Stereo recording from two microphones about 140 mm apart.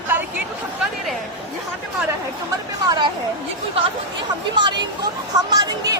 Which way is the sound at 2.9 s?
30° right (ahead or behind).